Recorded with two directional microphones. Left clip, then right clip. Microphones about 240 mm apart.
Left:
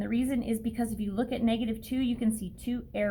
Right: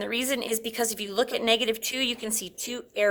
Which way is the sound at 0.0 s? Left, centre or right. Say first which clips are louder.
Right 4 dB; right.